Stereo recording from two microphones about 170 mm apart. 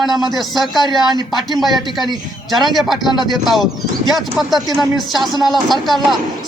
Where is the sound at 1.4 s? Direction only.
Centre (ahead or behind).